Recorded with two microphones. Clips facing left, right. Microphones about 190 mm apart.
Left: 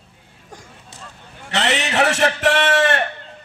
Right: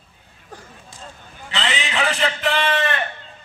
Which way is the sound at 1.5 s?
70° left (ahead or behind).